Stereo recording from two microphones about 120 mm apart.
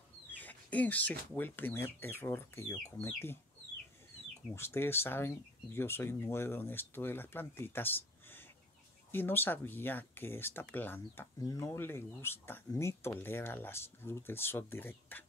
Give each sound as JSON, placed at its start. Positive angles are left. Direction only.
{"t": 0.3, "sound": "speech", "side_deg": 15}
{"t": 4.6, "sound": "speech", "side_deg": 20}
{"t": 11.3, "sound": "speech", "side_deg": 25}